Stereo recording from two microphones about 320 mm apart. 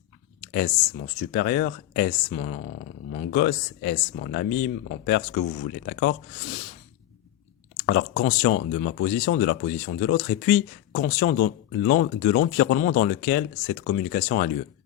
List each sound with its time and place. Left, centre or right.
1.3 s speech: left
7.8 s speech: left